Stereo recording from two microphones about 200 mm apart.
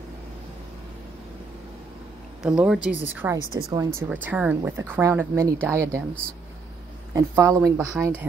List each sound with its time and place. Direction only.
2.4 s speech: 5° right (ahead or behind)
7.2 s speech: 15° right (ahead or behind)